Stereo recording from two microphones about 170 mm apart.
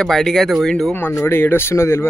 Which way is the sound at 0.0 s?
Centre (ahead or behind).